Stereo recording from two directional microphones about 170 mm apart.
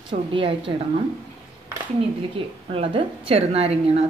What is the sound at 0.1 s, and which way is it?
Speech, 30° right (ahead or behind).